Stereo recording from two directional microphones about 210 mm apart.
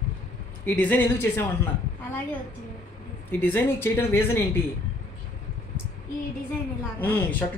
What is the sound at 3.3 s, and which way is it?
Speech, 10° left (ahead or behind).